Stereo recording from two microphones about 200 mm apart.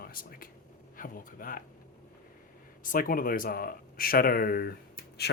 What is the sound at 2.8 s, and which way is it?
Speech, 45° left (ahead or behind).